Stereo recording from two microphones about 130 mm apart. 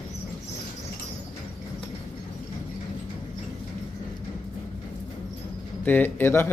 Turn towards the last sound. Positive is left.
turn(degrees=15)  # may be behind; listen again after turning